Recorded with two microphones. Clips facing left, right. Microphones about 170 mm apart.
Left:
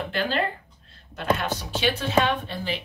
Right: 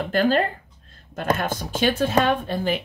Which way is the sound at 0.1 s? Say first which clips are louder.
Right 8 dB; 45° right (ahead or behind).